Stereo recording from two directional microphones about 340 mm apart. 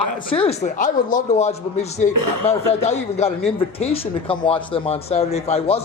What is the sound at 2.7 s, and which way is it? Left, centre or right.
A man's voice, centre.